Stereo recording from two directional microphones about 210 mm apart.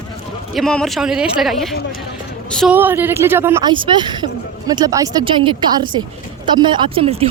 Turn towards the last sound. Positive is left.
turn(degrees=-25)  # may be behind; listen again after turning